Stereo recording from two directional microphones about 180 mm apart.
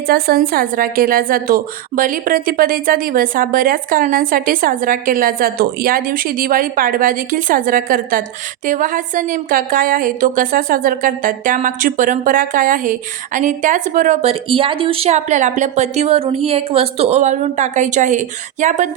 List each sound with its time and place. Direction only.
0.1 s a woman's voice: 55° right (ahead or behind)